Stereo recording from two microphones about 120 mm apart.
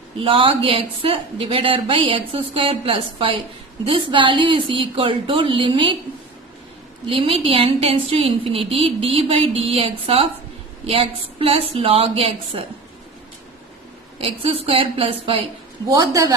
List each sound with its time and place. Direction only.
0.2 s a woman's voice: 50° right (ahead or behind)
7.1 s a woman's voice: 50° right (ahead or behind)
14.2 s a woman's voice: 50° right (ahead or behind)
15.9 s a woman's voice: 30° right (ahead or behind)